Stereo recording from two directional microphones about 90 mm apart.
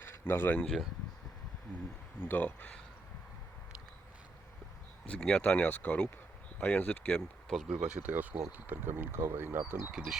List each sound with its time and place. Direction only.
0.0 s a sound: 25° left (ahead or behind)
0.6 s speech: 5° left (ahead or behind)
2.2 s speech: 20° left (ahead or behind)
5.0 s speech: 10° left (ahead or behind)
7.7 s speech: 10° right (ahead or behind)
9.9 s speech: 5° right (ahead or behind)